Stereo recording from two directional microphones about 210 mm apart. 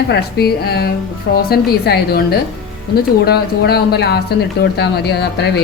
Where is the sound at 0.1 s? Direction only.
50° left (ahead or behind).